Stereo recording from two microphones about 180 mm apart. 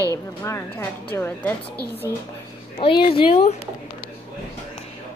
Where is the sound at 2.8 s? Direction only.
25° left (ahead or behind).